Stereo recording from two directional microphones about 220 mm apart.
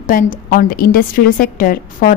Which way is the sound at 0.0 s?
40° left (ahead or behind).